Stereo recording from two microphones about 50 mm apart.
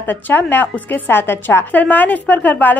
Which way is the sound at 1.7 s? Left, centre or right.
Left.